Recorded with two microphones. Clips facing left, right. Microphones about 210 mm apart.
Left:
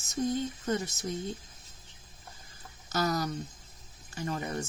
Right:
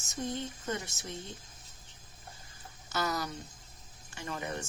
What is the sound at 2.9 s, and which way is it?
Speech, 40° left (ahead or behind).